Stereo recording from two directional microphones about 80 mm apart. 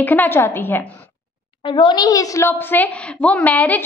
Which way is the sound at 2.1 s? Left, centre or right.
Left.